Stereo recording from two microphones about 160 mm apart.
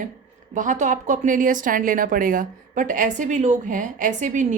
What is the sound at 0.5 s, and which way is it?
A woman's voice, 50° right (ahead or behind).